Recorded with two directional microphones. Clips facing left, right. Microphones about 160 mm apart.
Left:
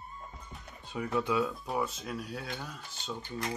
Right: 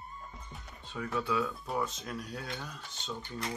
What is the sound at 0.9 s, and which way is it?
Speech, 20° left (ahead or behind).